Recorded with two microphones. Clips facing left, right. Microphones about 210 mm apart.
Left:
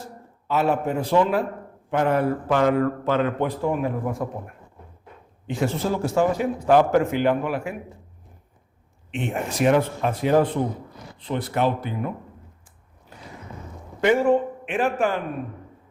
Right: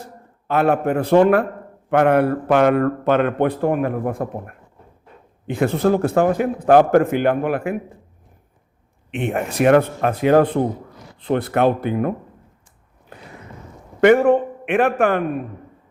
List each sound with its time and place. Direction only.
0.4 s speech: 60° right (ahead or behind)
9.1 s speech: 60° right (ahead or behind)
14.0 s speech: 60° right (ahead or behind)